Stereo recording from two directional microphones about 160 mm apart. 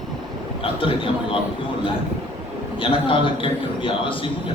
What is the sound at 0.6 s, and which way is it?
Speech, 35° left (ahead or behind).